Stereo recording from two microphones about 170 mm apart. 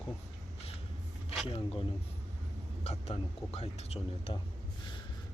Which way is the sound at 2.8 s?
40° left (ahead or behind).